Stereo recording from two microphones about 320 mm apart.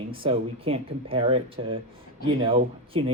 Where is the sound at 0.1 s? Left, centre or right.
Centre.